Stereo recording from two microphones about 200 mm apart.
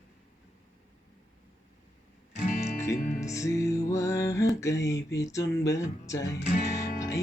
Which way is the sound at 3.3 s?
15° left (ahead or behind).